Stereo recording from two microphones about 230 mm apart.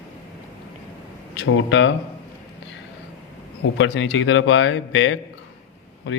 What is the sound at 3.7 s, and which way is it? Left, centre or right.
A man's voice, left.